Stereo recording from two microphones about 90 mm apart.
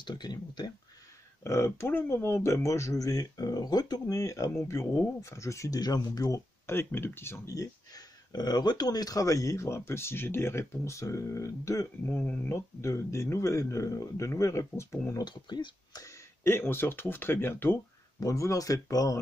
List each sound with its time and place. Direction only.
0.0 s speech: 55° left (ahead or behind)
1.4 s speech: 30° left (ahead or behind)
6.7 s speech: 25° left (ahead or behind)
12.1 s speech: 15° left (ahead or behind)
12.4 s speech: 30° left (ahead or behind)
15.2 s speech: 55° left (ahead or behind)
16.4 s speech: 25° left (ahead or behind)
18.2 s speech: 35° left (ahead or behind)